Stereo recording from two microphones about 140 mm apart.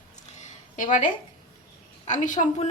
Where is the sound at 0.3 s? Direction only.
60° left (ahead or behind).